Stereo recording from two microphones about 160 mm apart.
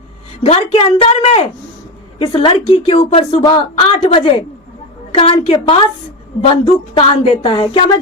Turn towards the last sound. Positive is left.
turn(degrees=35)  # may be behind; listen again after turning